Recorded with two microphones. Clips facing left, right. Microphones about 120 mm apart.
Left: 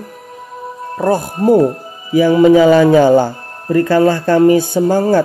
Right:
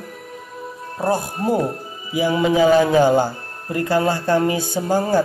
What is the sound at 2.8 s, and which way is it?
Speech, 60° left (ahead or behind).